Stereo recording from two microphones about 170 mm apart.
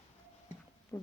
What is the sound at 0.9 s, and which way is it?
Speech, 15° left (ahead or behind).